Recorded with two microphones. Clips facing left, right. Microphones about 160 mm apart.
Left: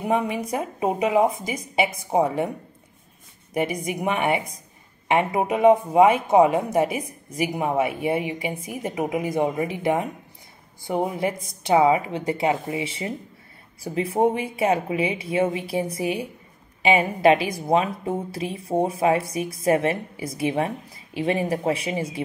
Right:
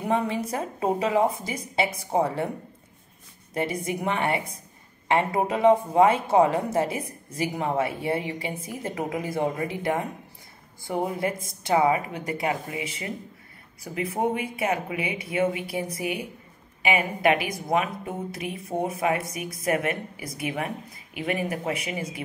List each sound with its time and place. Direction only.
0.0 s speech: 15° left (ahead or behind)
3.5 s speech: 15° left (ahead or behind)